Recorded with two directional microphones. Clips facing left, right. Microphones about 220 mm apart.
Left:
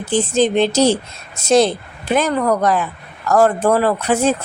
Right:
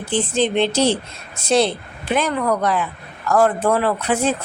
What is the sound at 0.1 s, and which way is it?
A woman's voice, 45° left (ahead or behind).